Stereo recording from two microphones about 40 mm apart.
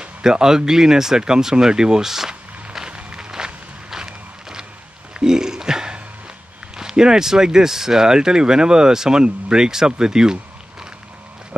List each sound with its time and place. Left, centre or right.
0.2 s speech: centre
2.9 s a sound: right
6.8 s speech: centre